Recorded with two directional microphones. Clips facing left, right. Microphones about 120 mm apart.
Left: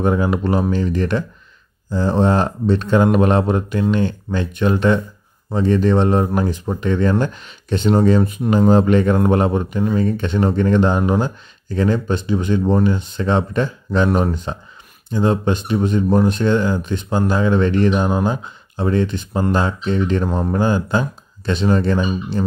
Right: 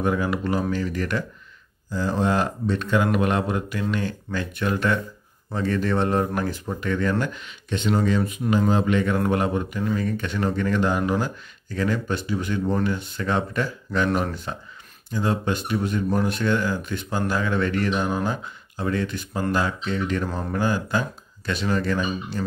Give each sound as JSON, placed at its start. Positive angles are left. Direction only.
{"t": 0.0, "sound": "speech", "side_deg": 30}